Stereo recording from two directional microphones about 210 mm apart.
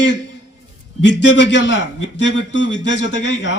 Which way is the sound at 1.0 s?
60° left (ahead or behind).